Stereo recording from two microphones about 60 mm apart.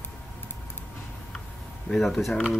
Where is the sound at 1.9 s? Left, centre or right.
Centre.